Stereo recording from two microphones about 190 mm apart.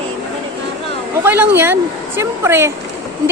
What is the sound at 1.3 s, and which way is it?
A woman's voice, 10° right (ahead or behind).